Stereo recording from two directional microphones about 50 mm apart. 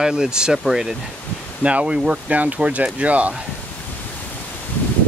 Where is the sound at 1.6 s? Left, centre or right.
Right.